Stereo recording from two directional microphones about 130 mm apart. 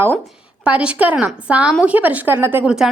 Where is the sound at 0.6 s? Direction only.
10° right (ahead or behind).